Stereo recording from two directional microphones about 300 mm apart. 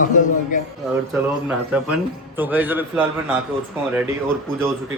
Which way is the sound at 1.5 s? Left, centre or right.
Centre.